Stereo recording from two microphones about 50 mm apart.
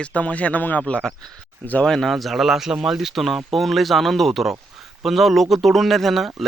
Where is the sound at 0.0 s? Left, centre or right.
Left.